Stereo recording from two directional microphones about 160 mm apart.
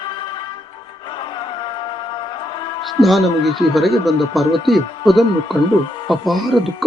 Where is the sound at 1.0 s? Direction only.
30° left (ahead or behind).